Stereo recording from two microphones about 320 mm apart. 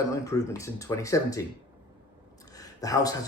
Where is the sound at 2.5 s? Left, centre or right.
Centre.